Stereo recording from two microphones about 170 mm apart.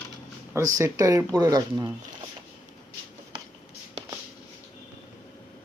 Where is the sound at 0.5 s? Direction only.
20° right (ahead or behind).